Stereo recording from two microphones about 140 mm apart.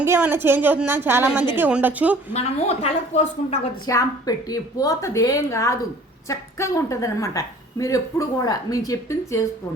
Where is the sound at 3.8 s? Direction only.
25° left (ahead or behind).